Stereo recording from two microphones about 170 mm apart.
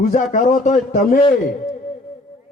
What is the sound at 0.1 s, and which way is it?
A man's voice, 45° left (ahead or behind).